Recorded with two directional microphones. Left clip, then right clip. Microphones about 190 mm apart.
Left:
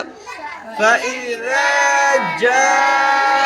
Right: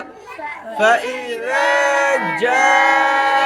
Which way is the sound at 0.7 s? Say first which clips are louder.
Even; 15° right (ahead or behind).